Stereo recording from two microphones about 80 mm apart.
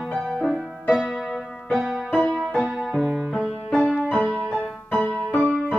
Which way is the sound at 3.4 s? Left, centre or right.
Centre.